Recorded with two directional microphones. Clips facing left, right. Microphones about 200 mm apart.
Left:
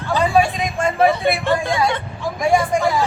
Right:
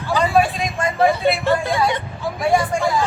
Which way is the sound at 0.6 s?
25° left (ahead or behind).